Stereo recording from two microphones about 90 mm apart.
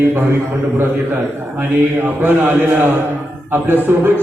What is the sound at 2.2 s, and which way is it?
A man's voice, 25° right (ahead or behind).